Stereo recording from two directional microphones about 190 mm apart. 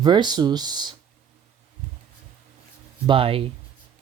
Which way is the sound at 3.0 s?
30° right (ahead or behind).